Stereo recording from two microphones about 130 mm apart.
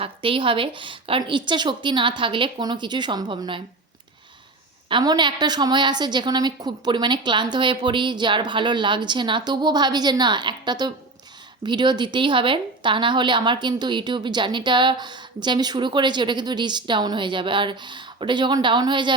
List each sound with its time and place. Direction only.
0.0 s a woman's voice: 40° right (ahead or behind)
4.9 s a woman's voice: 35° right (ahead or behind)